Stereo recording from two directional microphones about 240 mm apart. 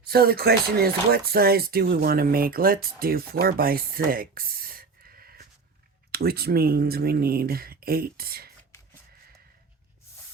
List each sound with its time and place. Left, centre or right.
0.0 s speech: right